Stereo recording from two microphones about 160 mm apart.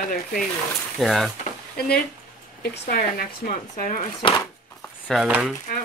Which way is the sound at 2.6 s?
70° left (ahead or behind).